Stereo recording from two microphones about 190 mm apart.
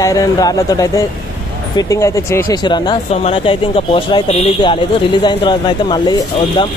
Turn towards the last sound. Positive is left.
turn(degrees=20)  # may be behind; listen again after turning